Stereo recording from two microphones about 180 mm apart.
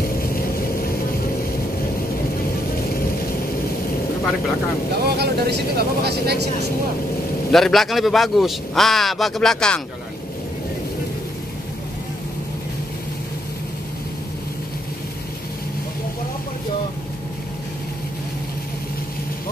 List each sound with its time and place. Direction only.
5.0 s speech: 60° right (ahead or behind)
7.5 s a man's voice: centre (ahead or behind)